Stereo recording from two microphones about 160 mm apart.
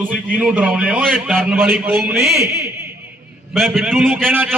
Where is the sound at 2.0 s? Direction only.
Centre (ahead or behind).